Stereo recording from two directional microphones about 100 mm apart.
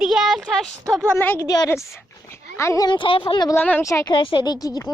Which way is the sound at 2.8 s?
55° left (ahead or behind).